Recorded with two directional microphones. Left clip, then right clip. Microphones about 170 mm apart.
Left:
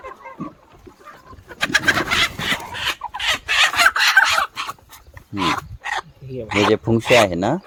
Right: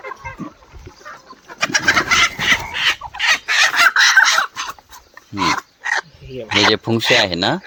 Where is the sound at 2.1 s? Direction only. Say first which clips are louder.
Right 5 dB; 55° left (ahead or behind).